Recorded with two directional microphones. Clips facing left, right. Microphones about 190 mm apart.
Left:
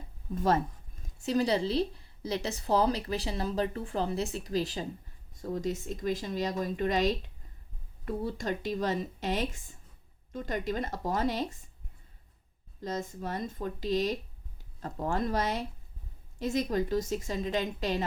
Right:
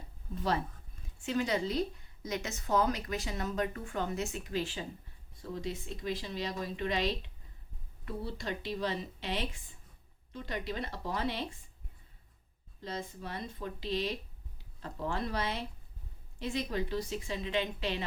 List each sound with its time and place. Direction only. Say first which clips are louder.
0.3 s a woman's voice: left 5 dB; 45° left (ahead or behind)
12.8 s a woman's voice: left 5 dB; 45° left (ahead or behind)